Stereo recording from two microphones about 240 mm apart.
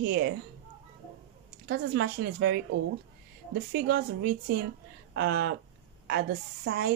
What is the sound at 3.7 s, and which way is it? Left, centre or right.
Speech, right.